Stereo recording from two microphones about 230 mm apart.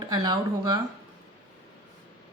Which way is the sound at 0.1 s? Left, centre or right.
Centre.